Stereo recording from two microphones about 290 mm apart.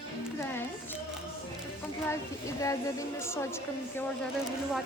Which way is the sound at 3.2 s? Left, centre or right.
Centre.